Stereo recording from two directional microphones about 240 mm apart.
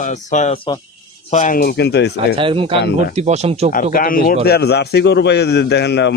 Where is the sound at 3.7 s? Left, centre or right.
Left.